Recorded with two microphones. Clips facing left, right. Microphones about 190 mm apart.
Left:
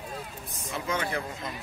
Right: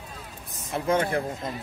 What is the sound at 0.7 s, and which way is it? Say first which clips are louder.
Speech: right 7 dB; 50° right (ahead or behind).